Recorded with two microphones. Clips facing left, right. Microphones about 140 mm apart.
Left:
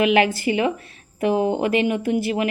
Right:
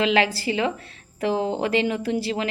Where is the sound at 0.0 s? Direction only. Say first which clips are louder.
Left 3 dB; 20° left (ahead or behind).